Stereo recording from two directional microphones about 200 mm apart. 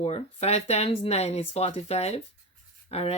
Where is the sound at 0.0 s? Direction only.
30° left (ahead or behind).